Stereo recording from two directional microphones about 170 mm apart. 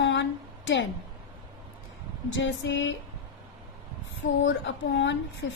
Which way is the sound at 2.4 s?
90° left.